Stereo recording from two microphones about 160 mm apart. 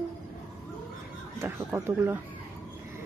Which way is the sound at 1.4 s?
15° right (ahead or behind).